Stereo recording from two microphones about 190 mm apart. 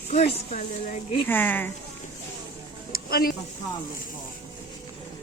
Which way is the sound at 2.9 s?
50° left (ahead or behind).